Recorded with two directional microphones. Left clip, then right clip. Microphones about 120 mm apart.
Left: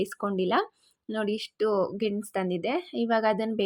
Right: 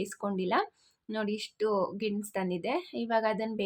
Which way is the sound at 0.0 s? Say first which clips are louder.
Left 5 dB; 35° left (ahead or behind).